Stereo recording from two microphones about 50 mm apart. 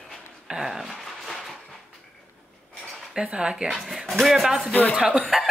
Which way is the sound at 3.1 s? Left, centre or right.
Centre.